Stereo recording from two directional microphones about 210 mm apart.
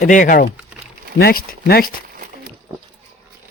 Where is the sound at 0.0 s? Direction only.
40° left (ahead or behind).